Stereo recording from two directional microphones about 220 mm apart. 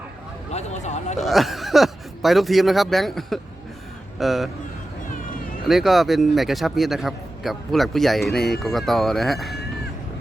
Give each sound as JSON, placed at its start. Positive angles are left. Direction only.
{"t": 0.5, "sound": "speech", "side_deg": 30}
{"t": 1.2, "sound": "a man's voice", "side_deg": 0}
{"t": 5.6, "sound": "a man's voice", "side_deg": 0}